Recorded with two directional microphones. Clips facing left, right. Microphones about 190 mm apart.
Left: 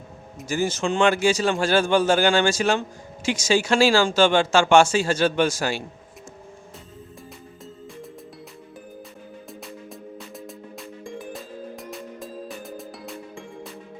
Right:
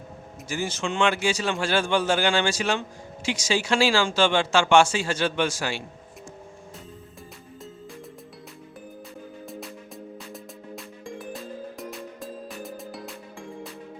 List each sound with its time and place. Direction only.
0.4 s speech: 45° left (ahead or behind)
10.3 s music: centre (ahead or behind)